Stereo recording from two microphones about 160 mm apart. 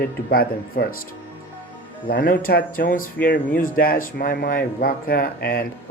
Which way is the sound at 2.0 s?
70° left (ahead or behind).